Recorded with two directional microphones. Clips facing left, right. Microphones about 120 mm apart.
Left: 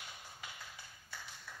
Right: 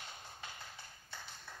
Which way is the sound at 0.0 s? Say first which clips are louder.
Right 1 dB; 35° right (ahead or behind).